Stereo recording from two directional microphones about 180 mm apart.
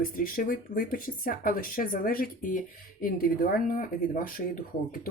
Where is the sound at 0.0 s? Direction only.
50° left (ahead or behind).